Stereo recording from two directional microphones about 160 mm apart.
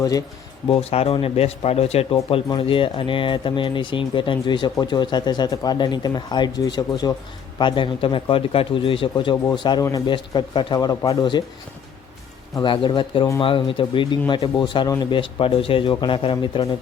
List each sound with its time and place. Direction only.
0.0 s speech: 20° left (ahead or behind)
0.7 s speech: 40° left (ahead or behind)
12.5 s speech: 30° left (ahead or behind)